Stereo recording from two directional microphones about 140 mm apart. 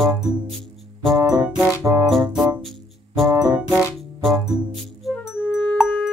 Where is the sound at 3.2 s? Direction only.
25° right (ahead or behind).